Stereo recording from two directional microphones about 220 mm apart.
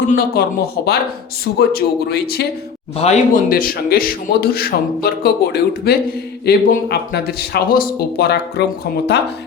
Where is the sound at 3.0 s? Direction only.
30° left (ahead or behind).